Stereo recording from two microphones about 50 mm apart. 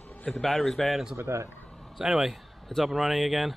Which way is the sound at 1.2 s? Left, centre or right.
Right.